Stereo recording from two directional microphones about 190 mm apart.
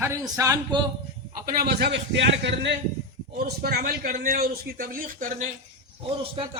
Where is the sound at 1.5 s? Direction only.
60° right (ahead or behind).